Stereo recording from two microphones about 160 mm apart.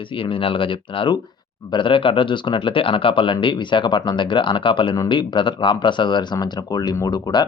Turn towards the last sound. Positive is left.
turn(degrees=25)  # may be behind; listen again after turning